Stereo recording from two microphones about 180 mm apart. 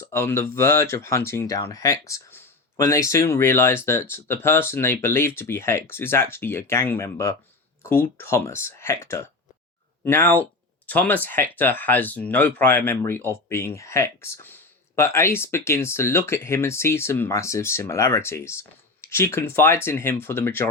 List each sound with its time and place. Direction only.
0.0 s speech: 15° left (ahead or behind)